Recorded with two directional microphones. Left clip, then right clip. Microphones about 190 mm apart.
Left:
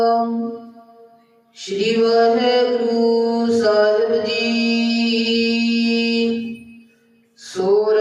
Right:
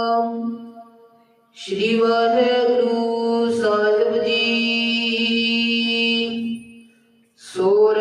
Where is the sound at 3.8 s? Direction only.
30° right (ahead or behind).